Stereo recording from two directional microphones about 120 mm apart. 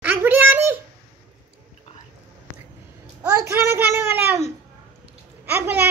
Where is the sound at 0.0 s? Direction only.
15° right (ahead or behind).